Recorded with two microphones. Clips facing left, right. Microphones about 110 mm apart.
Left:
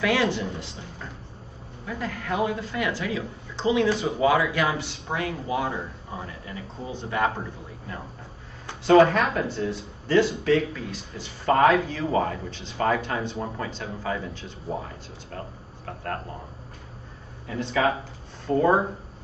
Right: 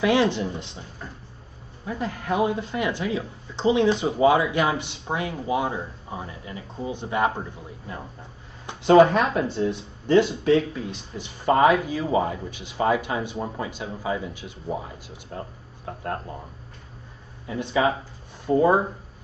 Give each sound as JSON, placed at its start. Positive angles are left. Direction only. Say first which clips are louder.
{"t": 0.0, "sound": "speech", "louder": "right 3 dB", "side_deg": -20}
{"t": 1.9, "sound": "speech", "louder": "right 3 dB", "side_deg": -20}
{"t": 8.6, "sound": "speech", "louder": "right 2 dB", "side_deg": -20}
{"t": 17.5, "sound": "speech", "louder": "right 1 dB", "side_deg": -15}